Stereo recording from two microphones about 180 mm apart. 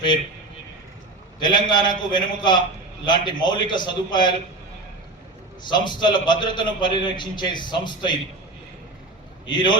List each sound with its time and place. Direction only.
1.4 s a man's voice: 25° left (ahead or behind)
5.6 s a man's voice: 25° left (ahead or behind)
9.5 s a man's voice: 25° left (ahead or behind)